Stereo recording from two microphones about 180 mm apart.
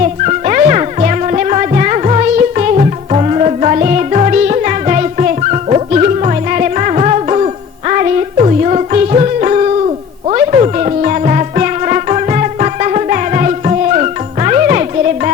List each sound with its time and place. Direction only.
0.0 s music: 45° right (ahead or behind)